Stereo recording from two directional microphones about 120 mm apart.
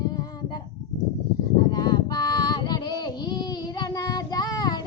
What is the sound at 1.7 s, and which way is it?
Child singing, 35° left (ahead or behind).